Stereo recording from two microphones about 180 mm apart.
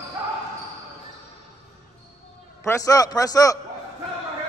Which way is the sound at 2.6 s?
15° left (ahead or behind).